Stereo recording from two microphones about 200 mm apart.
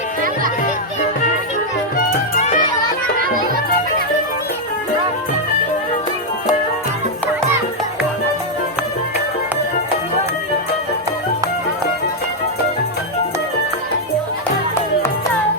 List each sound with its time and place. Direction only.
2.3 s music: 40° left (ahead or behind)